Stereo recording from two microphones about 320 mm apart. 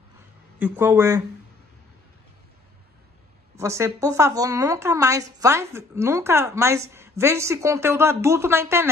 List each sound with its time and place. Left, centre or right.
0.6 s a woman's voice: centre
3.5 s a woman's voice: centre